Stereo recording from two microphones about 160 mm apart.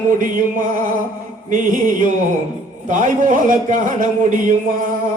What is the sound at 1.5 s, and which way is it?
Mantra, 55° right (ahead or behind).